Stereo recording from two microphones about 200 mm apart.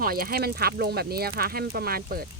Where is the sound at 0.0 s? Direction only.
45° right (ahead or behind).